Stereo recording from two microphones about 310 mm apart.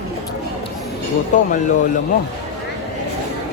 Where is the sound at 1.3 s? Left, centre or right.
Left.